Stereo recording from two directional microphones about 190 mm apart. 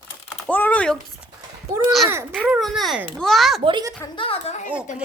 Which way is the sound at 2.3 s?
Centre (ahead or behind).